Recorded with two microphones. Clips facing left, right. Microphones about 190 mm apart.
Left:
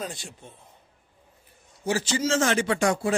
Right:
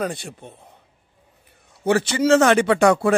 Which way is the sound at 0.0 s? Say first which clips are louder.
Right 9 dB; 60° right (ahead or behind).